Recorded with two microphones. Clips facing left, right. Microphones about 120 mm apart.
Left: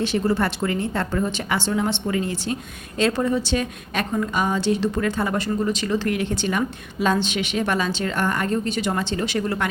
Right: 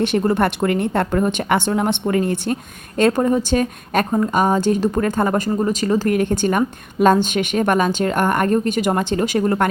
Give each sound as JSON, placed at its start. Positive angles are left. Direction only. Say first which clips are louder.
{"t": 0.0, "sound": "a woman's voice", "louder": "right 4 dB", "side_deg": -55}